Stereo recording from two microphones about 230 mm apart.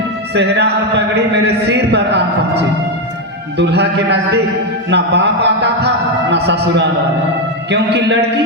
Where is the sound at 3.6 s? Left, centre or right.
Right.